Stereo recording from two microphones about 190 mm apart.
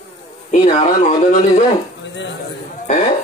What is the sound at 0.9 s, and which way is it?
Speech, 35° left (ahead or behind).